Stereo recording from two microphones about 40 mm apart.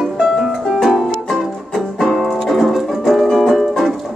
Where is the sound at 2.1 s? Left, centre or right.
Centre.